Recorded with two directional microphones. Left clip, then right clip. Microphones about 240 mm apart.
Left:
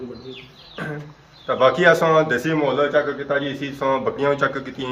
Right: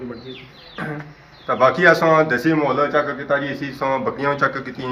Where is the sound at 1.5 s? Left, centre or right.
Centre.